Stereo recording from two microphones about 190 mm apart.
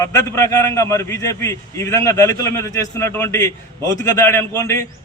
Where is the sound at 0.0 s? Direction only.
15° left (ahead or behind).